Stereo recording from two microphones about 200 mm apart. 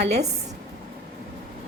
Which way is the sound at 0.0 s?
55° right (ahead or behind).